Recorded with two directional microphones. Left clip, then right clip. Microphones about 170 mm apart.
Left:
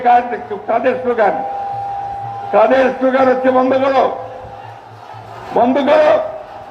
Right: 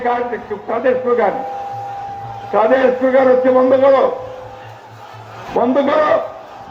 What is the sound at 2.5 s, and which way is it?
A man's voice, 30° left (ahead or behind).